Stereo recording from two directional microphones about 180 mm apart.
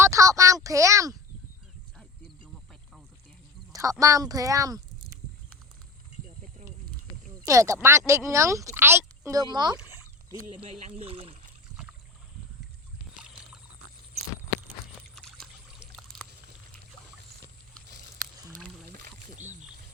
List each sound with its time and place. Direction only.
0.0 s speech: 15° right (ahead or behind)
3.7 s a sound: 20° right (ahead or behind)
4.0 s speech: 20° right (ahead or behind)
7.4 s speech: 15° right (ahead or behind)
10.6 s speech: 35° right (ahead or behind)
13.1 s rowboat: 5° right (ahead or behind)
15.8 s pour: centre (ahead or behind)
19.0 s rowboat: 40° right (ahead or behind)